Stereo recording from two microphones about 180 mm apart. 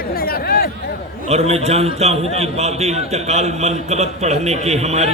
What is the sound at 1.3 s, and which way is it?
A man's voice, 35° right (ahead or behind).